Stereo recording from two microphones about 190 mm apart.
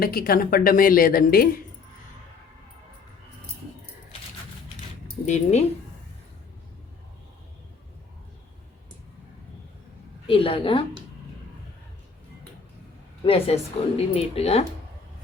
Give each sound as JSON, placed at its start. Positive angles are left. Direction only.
{"t": 0.0, "sound": "a woman's voice", "side_deg": 50}
{"t": 5.0, "sound": "keys jangling", "side_deg": 35}
{"t": 10.2, "sound": "a woman's voice", "side_deg": 30}
{"t": 13.2, "sound": "a woman's voice", "side_deg": 30}